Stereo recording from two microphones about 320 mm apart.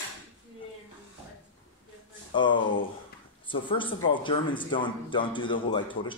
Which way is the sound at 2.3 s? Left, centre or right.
Centre.